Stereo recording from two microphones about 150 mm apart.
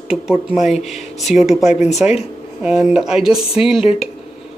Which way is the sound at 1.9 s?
45° left (ahead or behind).